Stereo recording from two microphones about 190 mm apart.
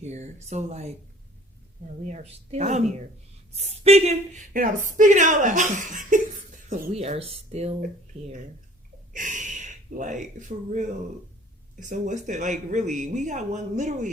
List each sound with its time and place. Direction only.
0.0 s speech: 35° right (ahead or behind)
2.0 s speech: 35° right (ahead or behind)
9.1 s speech: 40° right (ahead or behind)